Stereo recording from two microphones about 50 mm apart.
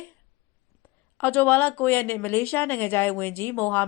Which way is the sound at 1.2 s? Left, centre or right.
Left.